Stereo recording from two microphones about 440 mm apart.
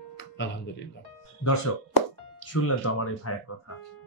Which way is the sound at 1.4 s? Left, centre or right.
Left.